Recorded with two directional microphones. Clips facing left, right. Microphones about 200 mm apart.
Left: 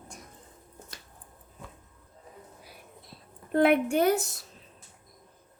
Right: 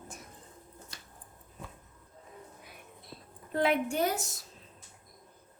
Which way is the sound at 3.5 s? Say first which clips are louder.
Left 6 dB; 55° left (ahead or behind).